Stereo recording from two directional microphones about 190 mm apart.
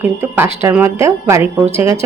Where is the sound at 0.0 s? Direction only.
10° right (ahead or behind).